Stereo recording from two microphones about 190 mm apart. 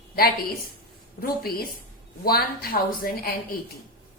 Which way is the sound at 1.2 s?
55° left (ahead or behind).